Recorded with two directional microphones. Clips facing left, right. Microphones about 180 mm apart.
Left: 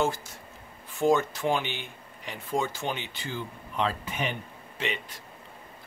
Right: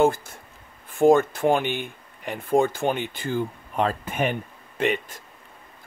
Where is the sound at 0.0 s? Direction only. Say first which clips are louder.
Right 8 dB; 55° right (ahead or behind).